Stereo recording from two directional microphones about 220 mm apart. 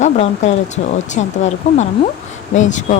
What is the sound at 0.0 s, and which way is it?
Speech, 30° left (ahead or behind).